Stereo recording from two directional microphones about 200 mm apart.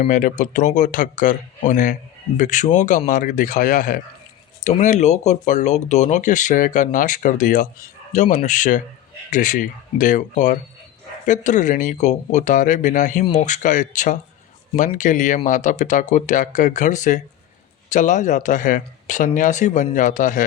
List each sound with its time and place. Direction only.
0.0 s speech: 40° left (ahead or behind)